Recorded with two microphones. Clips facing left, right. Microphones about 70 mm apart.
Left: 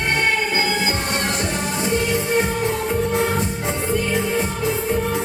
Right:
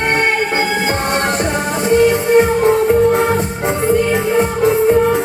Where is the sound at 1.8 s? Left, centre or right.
Right.